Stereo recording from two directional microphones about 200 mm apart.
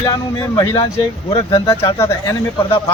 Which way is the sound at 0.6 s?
20° left (ahead or behind).